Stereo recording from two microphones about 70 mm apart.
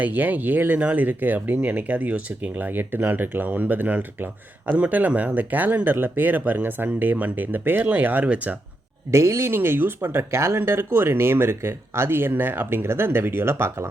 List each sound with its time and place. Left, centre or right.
0.0 s speech: right
9.1 s speech: right